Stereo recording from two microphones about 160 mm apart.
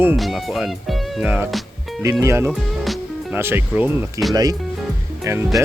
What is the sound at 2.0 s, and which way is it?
Speech, 20° right (ahead or behind).